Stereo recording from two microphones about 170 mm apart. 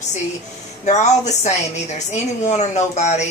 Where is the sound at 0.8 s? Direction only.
45° left (ahead or behind).